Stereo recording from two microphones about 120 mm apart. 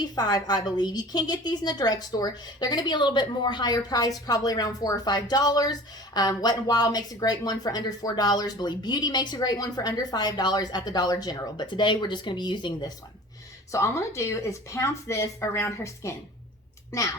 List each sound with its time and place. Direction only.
0.0 s speech: 35° left (ahead or behind)
13.7 s speech: 25° left (ahead or behind)